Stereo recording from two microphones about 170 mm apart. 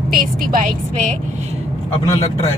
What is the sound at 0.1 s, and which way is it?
Speech, 55° right (ahead or behind).